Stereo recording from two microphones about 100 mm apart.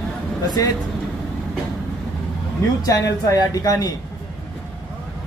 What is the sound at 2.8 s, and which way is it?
Speech, 35° left (ahead or behind).